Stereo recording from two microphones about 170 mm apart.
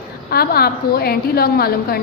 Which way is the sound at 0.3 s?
65° left (ahead or behind).